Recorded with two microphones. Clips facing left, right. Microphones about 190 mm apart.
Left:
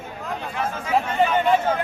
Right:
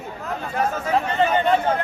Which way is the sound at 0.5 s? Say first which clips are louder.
Right 7 dB; 40° right (ahead or behind).